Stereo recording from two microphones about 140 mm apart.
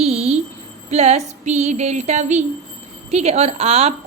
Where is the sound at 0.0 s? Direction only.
50° right (ahead or behind).